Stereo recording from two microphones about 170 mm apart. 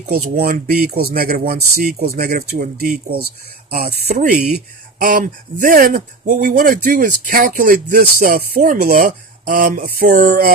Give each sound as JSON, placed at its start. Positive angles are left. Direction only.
{"t": 0.0, "sound": "speech", "side_deg": -60}
{"t": 3.8, "sound": "speech", "side_deg": -40}
{"t": 4.2, "sound": "speech", "side_deg": -60}